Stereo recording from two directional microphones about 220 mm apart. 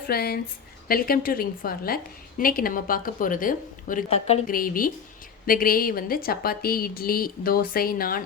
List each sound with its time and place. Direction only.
0.1 s a woman's voice: 45° left (ahead or behind)